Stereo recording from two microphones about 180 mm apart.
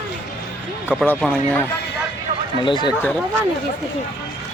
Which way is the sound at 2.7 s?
25° left (ahead or behind).